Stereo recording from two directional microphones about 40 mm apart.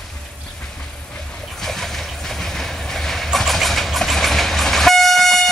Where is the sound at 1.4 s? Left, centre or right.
Centre.